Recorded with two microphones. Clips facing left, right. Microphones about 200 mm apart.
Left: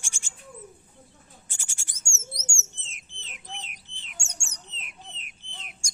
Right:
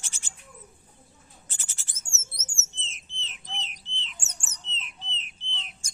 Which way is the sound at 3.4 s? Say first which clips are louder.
Right 1 dB; 55° left (ahead or behind).